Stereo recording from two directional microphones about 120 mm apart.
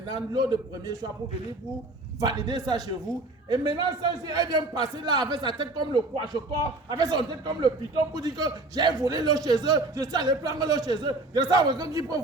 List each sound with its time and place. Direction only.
0.1 s a man's voice: 40° right (ahead or behind)
2.2 s a man's voice: 35° right (ahead or behind)